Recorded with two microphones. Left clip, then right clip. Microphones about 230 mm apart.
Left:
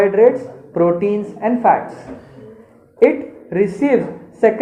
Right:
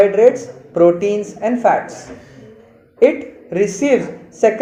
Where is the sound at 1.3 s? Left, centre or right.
Centre.